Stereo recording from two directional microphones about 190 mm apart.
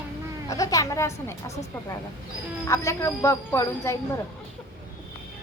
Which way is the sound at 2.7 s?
15° left (ahead or behind).